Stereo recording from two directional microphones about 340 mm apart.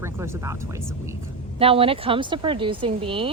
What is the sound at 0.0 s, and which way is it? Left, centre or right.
Speech, centre.